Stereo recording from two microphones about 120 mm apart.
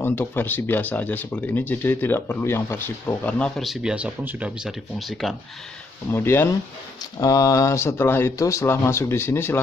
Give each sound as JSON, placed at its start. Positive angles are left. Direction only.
{"t": 0.0, "sound": "speech", "side_deg": 15}
{"t": 4.6, "sound": "speech", "side_deg": 0}
{"t": 6.1, "sound": "speech", "side_deg": 20}